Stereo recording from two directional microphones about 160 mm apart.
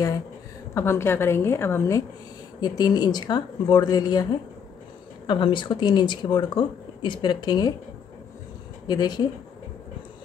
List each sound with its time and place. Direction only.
0.7 s a woman's voice: 15° left (ahead or behind)
8.8 s speech: 25° left (ahead or behind)